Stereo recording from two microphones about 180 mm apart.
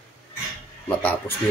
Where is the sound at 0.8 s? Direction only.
10° left (ahead or behind).